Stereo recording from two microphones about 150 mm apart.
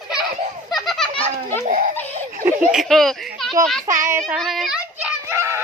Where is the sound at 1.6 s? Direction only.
55° right (ahead or behind).